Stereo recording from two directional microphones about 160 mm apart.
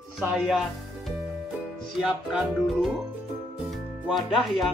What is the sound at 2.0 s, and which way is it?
Music, 5° right (ahead or behind).